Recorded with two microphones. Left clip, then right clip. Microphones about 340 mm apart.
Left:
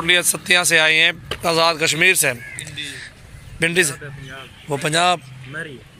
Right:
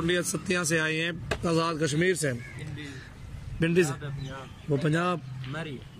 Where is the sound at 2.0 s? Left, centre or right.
Left.